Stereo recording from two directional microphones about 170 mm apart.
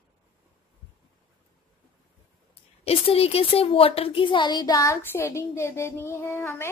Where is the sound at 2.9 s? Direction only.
35° left (ahead or behind); by 6.7 s 15° left (ahead or behind).